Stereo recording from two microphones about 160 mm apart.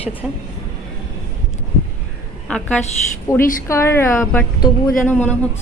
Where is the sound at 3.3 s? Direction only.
20° left (ahead or behind).